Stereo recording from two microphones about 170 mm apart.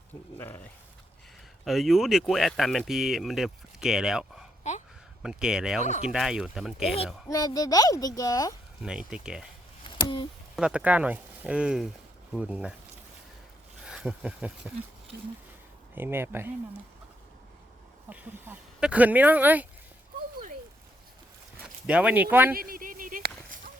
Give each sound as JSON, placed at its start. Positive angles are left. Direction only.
{"t": 0.3, "sound": "speech", "side_deg": 10}
{"t": 1.6, "sound": "speech", "side_deg": 0}
{"t": 5.8, "sound": "speech", "side_deg": 45}
{"t": 6.1, "sound": "speech", "side_deg": -5}
{"t": 7.3, "sound": "a child's voice", "side_deg": 20}
{"t": 8.8, "sound": "speech", "side_deg": -5}
{"t": 10.5, "sound": "speech", "side_deg": -5}
{"t": 13.8, "sound": "speech", "side_deg": -5}
{"t": 16.0, "sound": "speech", "side_deg": -15}
{"t": 18.1, "sound": "speech", "side_deg": -10}
{"t": 21.8, "sound": "speech", "side_deg": -5}
{"t": 22.5, "sound": "a sound", "side_deg": -60}